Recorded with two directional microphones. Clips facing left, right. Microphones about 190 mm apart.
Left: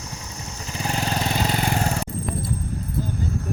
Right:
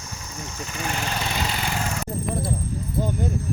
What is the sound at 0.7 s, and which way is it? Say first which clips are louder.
Vehicle: left 3 dB; 35° left (ahead or behind).